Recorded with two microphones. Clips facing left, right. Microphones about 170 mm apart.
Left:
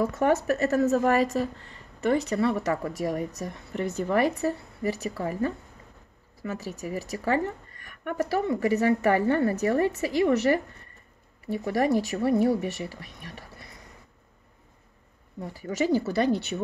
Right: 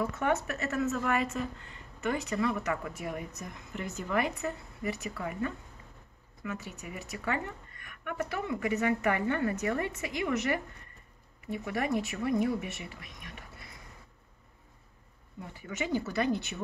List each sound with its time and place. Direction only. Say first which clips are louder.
0.0 s a woman's voice: left 6 dB; 40° left (ahead or behind)
15.4 s a woman's voice: left 9 dB; 35° left (ahead or behind)